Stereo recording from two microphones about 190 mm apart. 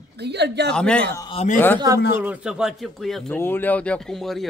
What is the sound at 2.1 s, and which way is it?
Speech, 5° right (ahead or behind).